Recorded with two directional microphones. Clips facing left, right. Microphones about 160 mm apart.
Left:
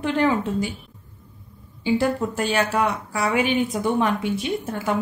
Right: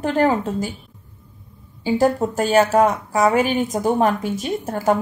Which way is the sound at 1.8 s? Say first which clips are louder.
Right 3 dB; 40° right (ahead or behind).